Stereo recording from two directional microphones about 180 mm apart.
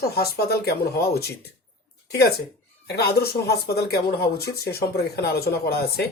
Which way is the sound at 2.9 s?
60° left (ahead or behind).